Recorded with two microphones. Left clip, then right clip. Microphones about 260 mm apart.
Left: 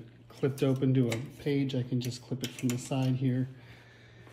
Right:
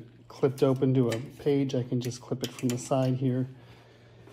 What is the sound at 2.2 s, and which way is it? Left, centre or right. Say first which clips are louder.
Speech: right 4 dB; centre.